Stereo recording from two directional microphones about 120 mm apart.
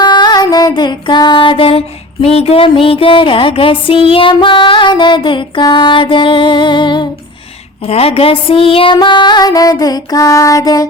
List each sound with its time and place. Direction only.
0.0 s music: 40° left (ahead or behind)
7.9 s music: 55° left (ahead or behind); by 10.8 s 30° left (ahead or behind)